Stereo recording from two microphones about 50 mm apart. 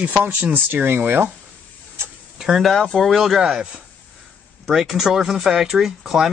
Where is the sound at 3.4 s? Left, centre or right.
Centre.